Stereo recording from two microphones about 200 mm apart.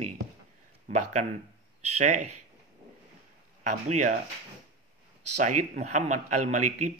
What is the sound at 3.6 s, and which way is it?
Speech, 35° right (ahead or behind).